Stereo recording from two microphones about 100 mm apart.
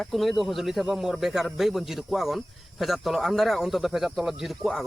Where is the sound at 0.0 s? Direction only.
Centre (ahead or behind).